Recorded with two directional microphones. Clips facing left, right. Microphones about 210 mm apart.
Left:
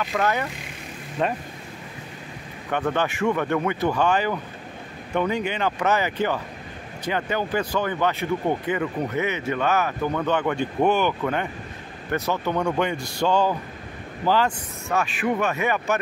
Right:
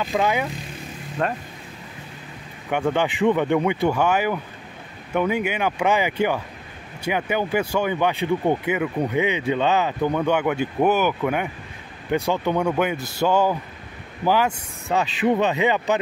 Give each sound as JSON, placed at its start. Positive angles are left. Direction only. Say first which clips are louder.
{"t": 0.0, "sound": "speech", "louder": "right 2 dB", "side_deg": -15}
{"t": 1.2, "sound": "speech", "louder": "even", "side_deg": 5}
{"t": 2.7, "sound": "speech", "louder": "right 2 dB", "side_deg": -15}